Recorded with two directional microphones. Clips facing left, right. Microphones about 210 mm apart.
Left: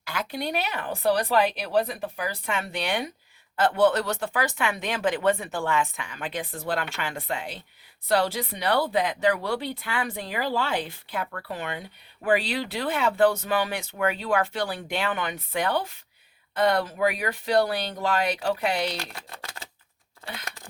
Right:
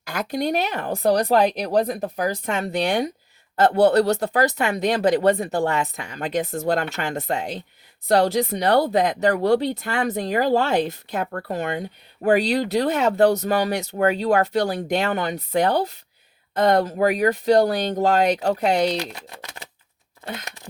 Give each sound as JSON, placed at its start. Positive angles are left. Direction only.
{"t": 0.0, "sound": "speech", "side_deg": -40}